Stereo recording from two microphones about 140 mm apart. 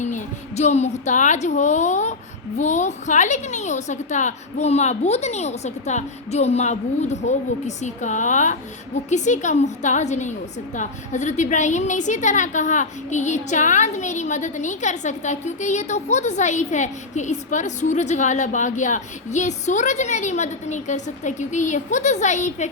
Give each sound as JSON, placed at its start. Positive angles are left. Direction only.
{"t": 0.0, "sound": "a woman's voice", "side_deg": 55}